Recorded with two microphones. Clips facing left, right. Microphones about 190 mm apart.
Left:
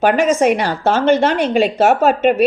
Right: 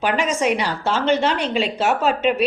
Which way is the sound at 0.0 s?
50° left (ahead or behind).